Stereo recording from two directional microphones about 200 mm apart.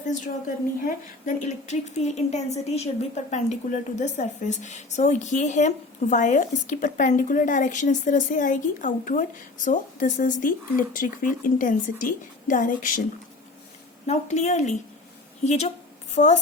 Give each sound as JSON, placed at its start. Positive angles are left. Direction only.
{"t": 0.9, "sound": "a woman's voice", "side_deg": 40}
{"t": 14.1, "sound": "a woman's voice", "side_deg": 35}